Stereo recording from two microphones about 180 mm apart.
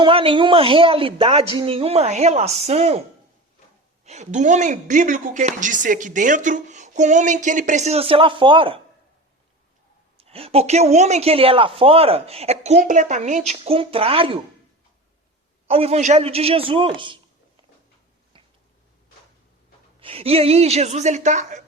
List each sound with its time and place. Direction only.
0.0 s speech: 30° right (ahead or behind)
4.0 s speech: 40° right (ahead or behind)
10.2 s speech: 35° right (ahead or behind)
15.6 s speech: 35° right (ahead or behind)
18.3 s a sound: 30° right (ahead or behind)
20.0 s speech: 30° right (ahead or behind)